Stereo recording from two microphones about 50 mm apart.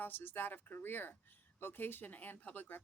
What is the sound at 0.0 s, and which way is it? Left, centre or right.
A woman's voice, left.